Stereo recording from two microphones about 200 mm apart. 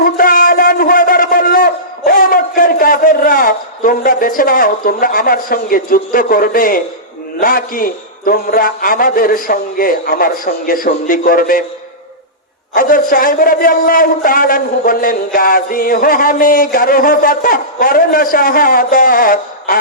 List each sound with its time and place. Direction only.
0.0 s a sound: 45° left (ahead or behind)
7.3 s a man's voice: 45° left (ahead or behind)
12.7 s a man's voice: 45° left (ahead or behind)